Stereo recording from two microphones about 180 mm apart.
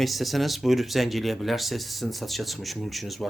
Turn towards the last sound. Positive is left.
turn(degrees=0)  # may be behind; listen again after turning